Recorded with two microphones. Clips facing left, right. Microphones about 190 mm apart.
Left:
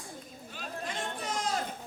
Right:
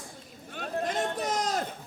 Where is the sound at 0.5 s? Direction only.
50° right (ahead or behind).